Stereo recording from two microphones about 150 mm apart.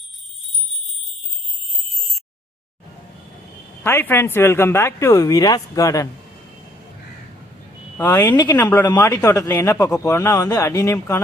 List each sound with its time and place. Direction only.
3.8 s speech: 15° left (ahead or behind)
7.9 s speech: 15° left (ahead or behind)